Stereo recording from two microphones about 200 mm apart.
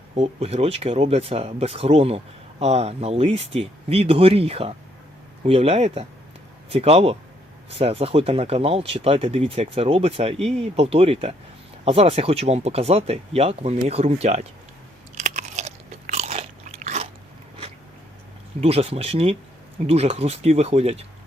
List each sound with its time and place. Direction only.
0.2 s speech: 30° right (ahead or behind)
15.1 s biting: 35° right (ahead or behind)
18.6 s speech: 30° right (ahead or behind)